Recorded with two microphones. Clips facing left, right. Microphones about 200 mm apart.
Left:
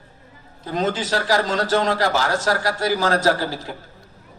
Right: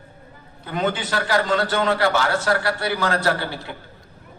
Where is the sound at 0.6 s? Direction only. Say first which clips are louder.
Left 1 dB; 35° left (ahead or behind).